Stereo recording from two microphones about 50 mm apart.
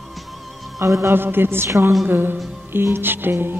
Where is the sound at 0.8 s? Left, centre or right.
Right.